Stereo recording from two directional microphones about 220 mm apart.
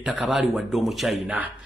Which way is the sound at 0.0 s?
Centre (ahead or behind).